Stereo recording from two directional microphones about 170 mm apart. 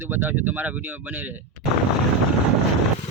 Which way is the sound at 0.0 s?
10° right (ahead or behind).